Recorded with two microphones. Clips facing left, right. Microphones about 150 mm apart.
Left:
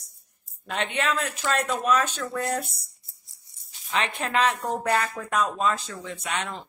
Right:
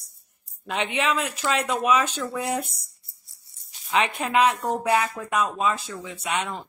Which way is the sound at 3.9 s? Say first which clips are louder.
Right 3 dB; 10° right (ahead or behind).